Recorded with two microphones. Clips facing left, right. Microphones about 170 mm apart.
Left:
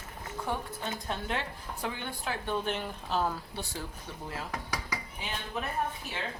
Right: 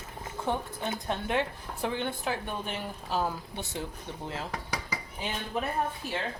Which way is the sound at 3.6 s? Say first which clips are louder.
Right 5 dB; 20° right (ahead or behind).